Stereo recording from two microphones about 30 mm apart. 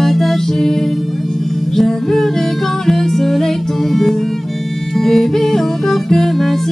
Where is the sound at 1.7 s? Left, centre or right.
Centre.